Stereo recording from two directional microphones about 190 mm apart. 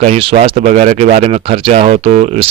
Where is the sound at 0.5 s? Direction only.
40° right (ahead or behind).